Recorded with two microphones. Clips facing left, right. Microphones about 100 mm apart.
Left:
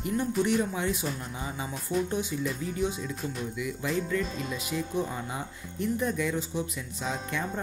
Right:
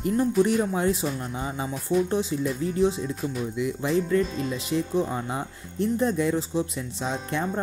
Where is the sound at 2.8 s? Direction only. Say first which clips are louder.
Right 7 dB; 30° right (ahead or behind).